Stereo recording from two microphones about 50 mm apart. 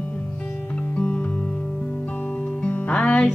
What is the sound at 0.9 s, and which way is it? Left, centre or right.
Music, left.